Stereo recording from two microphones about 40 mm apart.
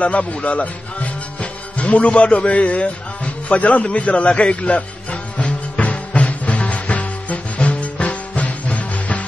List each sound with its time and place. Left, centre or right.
0.0 s speech: left
3.8 s music: left